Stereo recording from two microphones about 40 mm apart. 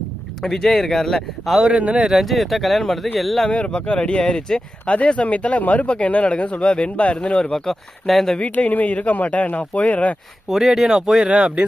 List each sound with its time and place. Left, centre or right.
0.4 s speech: centre
1.8 s speech: right
2.2 s speech: centre
3.5 s speech: left
5.0 s speech: left
7.5 s speech: centre
8.4 s speech: left
10.5 s speech: centre